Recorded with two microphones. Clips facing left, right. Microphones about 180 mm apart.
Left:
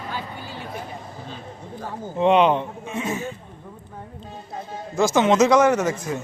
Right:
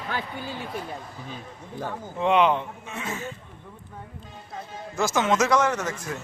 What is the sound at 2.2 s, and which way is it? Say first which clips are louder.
Speech: left 4 dB; 20° left (ahead or behind).